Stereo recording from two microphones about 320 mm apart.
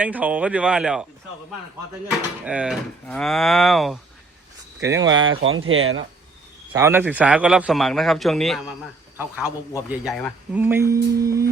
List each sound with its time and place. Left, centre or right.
0.0 s a man's voice: centre
2.4 s a man's voice: centre
5.5 s speech: right
6.7 s a man's voice: centre